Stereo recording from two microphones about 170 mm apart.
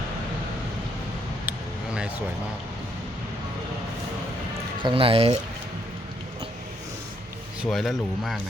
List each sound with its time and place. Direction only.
1.5 s a sound: 5° right (ahead or behind)
4.8 s speech: 30° right (ahead or behind)
7.6 s speech: centre (ahead or behind)